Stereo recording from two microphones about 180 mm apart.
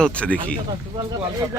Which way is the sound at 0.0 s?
5° left (ahead or behind).